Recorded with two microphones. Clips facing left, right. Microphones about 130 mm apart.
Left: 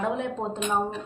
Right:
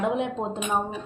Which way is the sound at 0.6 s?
5° right (ahead or behind).